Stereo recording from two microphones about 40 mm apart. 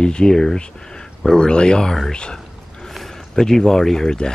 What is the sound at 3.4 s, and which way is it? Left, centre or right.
Speech, centre.